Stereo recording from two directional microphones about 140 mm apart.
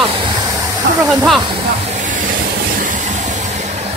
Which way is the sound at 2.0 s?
70° right (ahead or behind).